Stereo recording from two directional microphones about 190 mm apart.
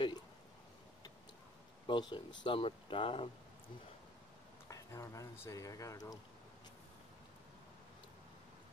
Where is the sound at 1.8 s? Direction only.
25° left (ahead or behind).